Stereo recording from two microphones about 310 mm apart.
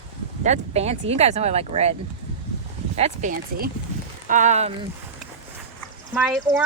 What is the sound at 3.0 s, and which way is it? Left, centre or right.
Speech, right.